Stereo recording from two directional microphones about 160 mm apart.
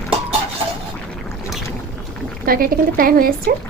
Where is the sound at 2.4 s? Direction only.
65° right (ahead or behind).